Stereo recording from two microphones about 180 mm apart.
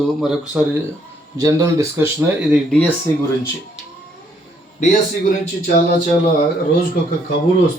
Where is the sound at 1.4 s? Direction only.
20° right (ahead or behind).